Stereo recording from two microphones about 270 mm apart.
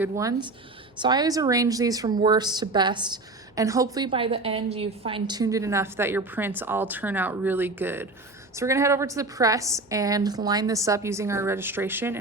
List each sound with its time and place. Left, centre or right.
0.0 s a woman's voice: centre